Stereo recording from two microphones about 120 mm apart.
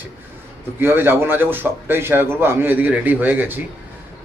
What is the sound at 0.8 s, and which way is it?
A man's voice, 15° right (ahead or behind).